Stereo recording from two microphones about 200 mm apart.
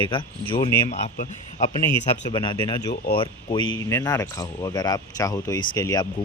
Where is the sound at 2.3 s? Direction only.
20° left (ahead or behind).